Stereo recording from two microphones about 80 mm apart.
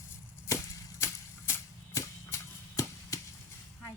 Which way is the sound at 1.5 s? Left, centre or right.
Left.